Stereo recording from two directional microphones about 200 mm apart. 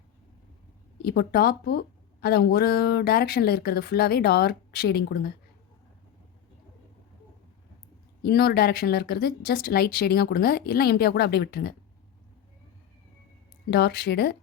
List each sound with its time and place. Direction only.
1.0 s speech: 50° left (ahead or behind)
8.2 s speech: 50° left (ahead or behind)
13.7 s speech: 55° left (ahead or behind)